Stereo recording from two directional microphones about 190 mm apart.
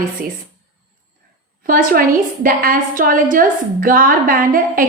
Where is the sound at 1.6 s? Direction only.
50° right (ahead or behind).